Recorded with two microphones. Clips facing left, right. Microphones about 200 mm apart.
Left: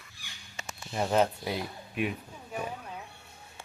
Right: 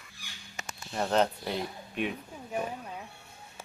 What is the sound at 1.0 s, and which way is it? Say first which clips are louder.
Speech: left 1 dB; 10° left (ahead or behind).